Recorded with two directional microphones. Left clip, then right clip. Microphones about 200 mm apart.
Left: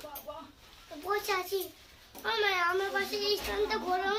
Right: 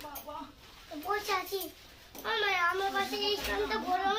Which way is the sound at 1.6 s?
50° left (ahead or behind).